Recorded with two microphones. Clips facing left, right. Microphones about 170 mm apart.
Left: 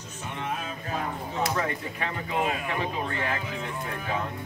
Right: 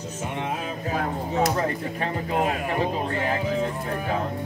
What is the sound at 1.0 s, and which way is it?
Speech, 40° right (ahead or behind).